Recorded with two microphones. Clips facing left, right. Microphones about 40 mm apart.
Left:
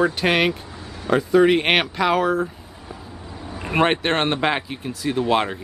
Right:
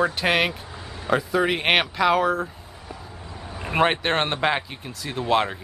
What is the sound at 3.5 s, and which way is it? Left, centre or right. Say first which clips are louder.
Speech: left 2 dB; centre.